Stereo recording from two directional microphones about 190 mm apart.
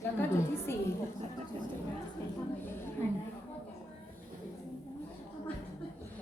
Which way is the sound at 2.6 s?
10° left (ahead or behind).